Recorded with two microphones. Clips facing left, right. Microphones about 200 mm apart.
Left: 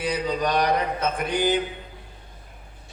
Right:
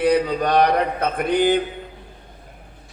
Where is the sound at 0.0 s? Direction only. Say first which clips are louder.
Right 7 dB; 55° right (ahead or behind).